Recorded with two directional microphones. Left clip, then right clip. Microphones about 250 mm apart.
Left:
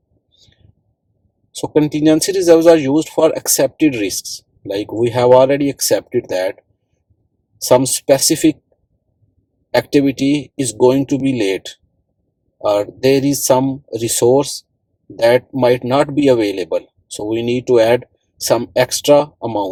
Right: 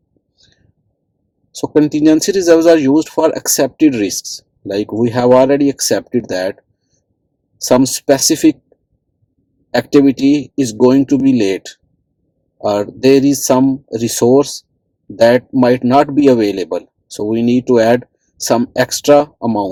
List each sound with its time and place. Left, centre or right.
1.5 s speech: right
7.6 s speech: right
10.2 s speech: right